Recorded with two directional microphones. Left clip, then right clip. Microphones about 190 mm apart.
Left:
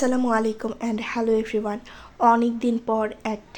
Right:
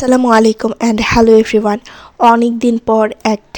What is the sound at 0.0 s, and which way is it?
Speech, 50° right (ahead or behind).